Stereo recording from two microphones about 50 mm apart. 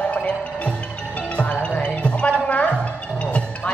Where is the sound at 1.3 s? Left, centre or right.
Left.